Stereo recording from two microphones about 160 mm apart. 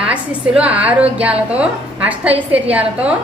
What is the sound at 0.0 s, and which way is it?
A woman's voice, 5° right (ahead or behind).